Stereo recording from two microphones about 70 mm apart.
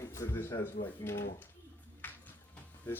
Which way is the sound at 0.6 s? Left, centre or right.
Left.